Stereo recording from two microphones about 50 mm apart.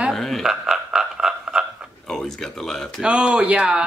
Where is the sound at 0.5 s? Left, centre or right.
Centre.